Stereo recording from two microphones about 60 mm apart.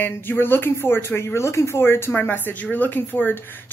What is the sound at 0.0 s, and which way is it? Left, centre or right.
A woman's voice, left.